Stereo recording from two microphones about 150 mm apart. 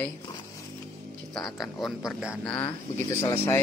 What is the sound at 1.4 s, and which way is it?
Speech, centre (ahead or behind).